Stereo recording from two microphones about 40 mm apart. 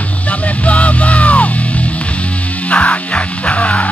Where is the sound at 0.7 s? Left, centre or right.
Left.